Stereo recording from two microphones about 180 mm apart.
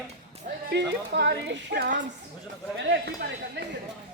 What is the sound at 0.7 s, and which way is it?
Speech, 70° right (ahead or behind).